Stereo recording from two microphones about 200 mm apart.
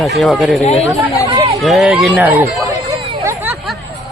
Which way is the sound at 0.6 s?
30° left (ahead or behind).